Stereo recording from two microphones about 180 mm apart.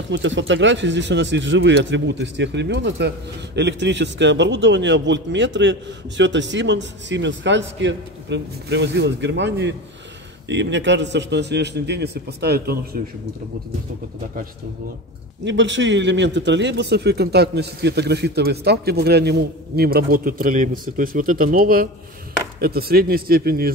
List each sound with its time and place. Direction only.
0.1 s a man's voice: 90° right; by 13.0 s 60° right (ahead or behind)
15.4 s a man's voice: 85° right; by 23.7 s 55° right (ahead or behind)